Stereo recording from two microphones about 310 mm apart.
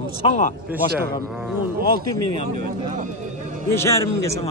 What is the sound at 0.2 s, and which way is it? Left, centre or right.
Speech, centre.